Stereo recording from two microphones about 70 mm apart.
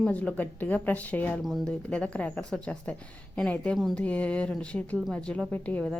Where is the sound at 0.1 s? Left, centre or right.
Centre.